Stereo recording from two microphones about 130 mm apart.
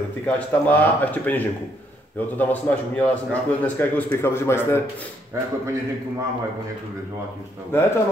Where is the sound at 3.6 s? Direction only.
15° left (ahead or behind).